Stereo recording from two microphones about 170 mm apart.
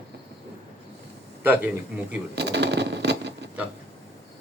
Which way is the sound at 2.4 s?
85° right.